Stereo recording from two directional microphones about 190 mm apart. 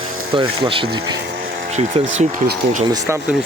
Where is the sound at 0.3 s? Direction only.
25° right (ahead or behind).